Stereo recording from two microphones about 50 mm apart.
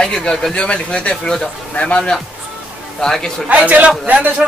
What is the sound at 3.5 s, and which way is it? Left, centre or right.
Speech, right.